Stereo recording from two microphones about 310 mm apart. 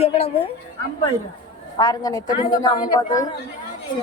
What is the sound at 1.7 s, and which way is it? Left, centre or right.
A woman's voice, centre.